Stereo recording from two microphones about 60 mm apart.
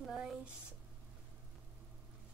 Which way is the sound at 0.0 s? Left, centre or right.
Centre.